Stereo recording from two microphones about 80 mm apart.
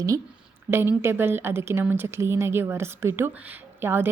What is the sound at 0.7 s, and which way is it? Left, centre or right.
A woman's voice, right.